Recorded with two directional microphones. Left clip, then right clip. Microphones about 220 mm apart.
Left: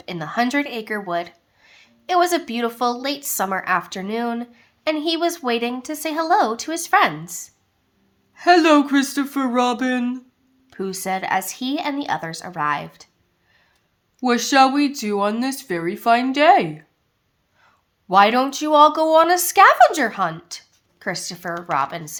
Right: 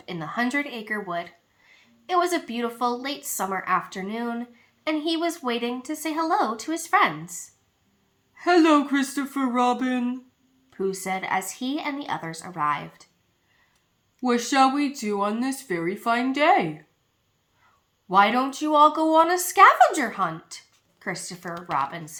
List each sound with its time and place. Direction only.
0.0 s speech: 35° left (ahead or behind)
14.2 s speech: 30° left (ahead or behind)
18.1 s speech: 35° left (ahead or behind)